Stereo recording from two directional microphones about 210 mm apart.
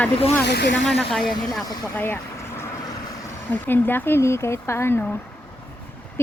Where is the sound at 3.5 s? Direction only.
10° left (ahead or behind).